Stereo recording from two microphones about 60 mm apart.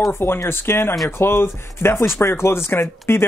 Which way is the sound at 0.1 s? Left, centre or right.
Left.